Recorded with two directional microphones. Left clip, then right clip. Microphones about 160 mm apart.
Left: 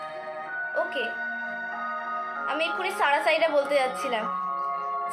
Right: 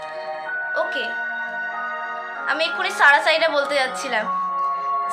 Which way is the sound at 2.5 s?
40° right (ahead or behind).